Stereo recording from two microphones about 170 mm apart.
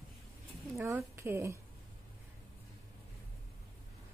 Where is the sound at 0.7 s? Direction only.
15° right (ahead or behind).